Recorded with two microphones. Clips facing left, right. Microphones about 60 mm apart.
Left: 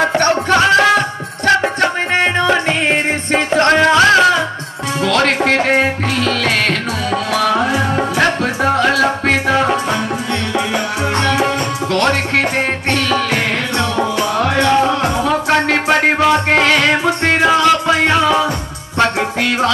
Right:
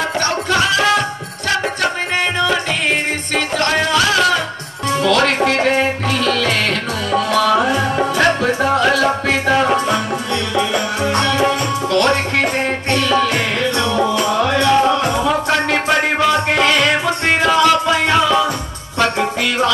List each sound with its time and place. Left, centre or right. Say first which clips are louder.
0.0 s music: left 5 dB; left
3.9 s music: left 5 dB; left
7.3 s music: right 1 dB; left
7.7 s music: even; centre
11.1 s music: left 1 dB; left
14.5 s music: even; centre
17.4 s music: left 1 dB; centre